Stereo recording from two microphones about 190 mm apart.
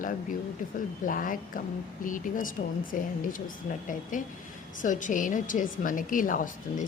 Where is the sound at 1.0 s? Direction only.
45° left (ahead or behind).